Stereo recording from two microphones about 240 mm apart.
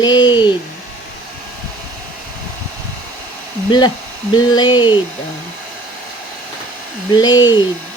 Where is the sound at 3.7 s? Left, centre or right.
Centre.